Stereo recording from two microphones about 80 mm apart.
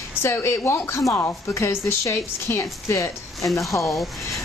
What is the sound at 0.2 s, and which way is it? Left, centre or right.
A woman's voice, left.